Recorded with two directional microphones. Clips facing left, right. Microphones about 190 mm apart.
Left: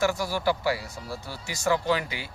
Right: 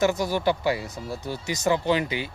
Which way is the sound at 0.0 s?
20° right (ahead or behind).